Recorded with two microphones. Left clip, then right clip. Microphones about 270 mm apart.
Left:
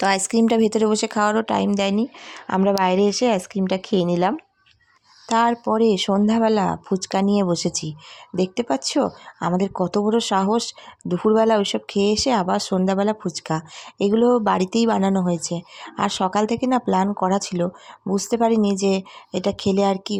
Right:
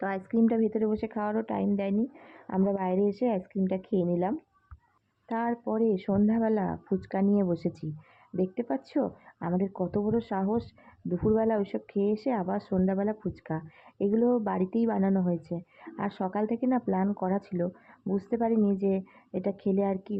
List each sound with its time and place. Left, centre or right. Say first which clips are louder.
0.0 s speech: left 10 dB; left